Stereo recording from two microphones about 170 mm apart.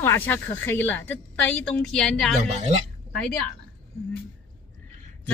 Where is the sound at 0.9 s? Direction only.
90° left.